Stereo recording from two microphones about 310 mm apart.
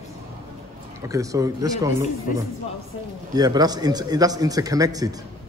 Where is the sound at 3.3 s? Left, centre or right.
Centre.